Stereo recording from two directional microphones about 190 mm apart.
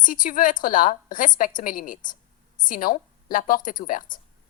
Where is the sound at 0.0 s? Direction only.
45° left (ahead or behind).